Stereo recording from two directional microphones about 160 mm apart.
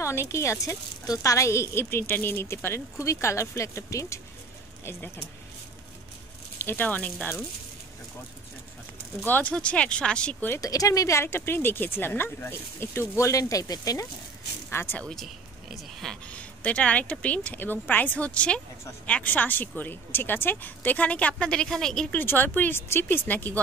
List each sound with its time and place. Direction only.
0.0 s a woman's voice: 15° left (ahead or behind)
6.6 s a woman's voice: 10° left (ahead or behind)
9.2 s a woman's voice: 10° left (ahead or behind)
15.7 s a woman's voice: 5° left (ahead or behind)